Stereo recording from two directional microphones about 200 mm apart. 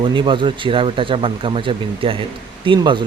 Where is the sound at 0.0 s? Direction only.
25° right (ahead or behind).